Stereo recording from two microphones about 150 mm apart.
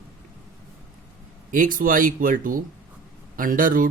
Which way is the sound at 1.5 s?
65° right (ahead or behind).